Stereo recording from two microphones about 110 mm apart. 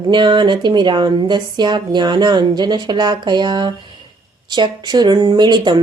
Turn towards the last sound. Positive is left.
turn(degrees=-40)  # may be behind; listen again after turning